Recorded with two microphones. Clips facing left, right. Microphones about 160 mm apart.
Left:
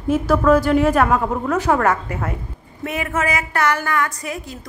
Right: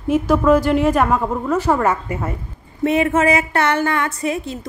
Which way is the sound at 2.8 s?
25° right (ahead or behind).